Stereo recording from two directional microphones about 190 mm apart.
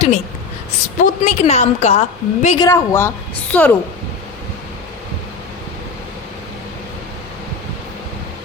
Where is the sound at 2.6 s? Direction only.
15° left (ahead or behind).